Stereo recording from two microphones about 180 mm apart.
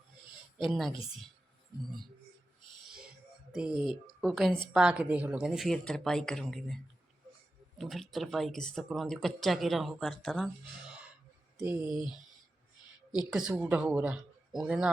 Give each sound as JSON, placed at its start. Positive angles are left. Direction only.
{"t": 0.6, "sound": "speech", "side_deg": 0}
{"t": 3.5, "sound": "speech", "side_deg": -5}
{"t": 7.8, "sound": "speech", "side_deg": 0}
{"t": 13.5, "sound": "speech", "side_deg": -10}